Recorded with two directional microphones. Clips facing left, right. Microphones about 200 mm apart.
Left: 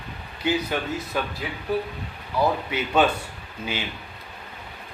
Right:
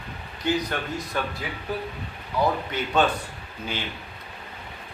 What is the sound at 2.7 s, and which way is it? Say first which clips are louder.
Speech: left 3 dB; 10° left (ahead or behind).